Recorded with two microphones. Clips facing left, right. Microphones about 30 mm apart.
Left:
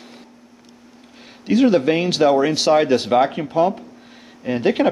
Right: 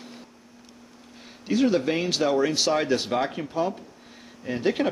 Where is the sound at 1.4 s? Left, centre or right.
Centre.